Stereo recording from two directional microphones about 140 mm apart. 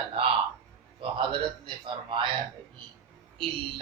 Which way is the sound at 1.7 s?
35° right (ahead or behind).